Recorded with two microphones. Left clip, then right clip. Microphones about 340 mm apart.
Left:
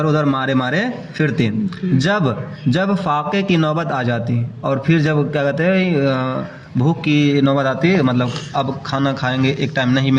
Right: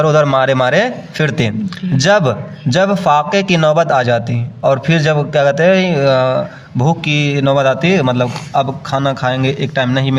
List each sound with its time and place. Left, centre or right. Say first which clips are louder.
0.0 s a man's voice: right 7 dB; right